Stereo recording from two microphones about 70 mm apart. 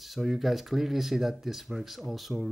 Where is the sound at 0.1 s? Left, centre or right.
Centre.